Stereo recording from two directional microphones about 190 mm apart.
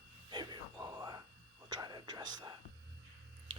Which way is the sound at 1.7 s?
20° right (ahead or behind).